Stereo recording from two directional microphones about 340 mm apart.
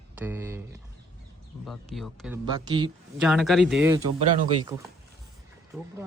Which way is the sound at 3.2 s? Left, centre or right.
Centre.